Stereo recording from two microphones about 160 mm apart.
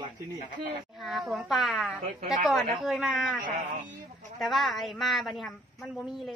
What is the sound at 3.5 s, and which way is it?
Speech, 50° right (ahead or behind).